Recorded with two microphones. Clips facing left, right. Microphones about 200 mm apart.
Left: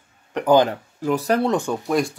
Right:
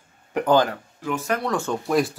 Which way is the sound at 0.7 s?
35° left (ahead or behind).